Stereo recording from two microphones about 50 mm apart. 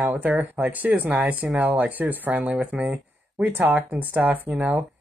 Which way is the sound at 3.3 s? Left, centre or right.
Right.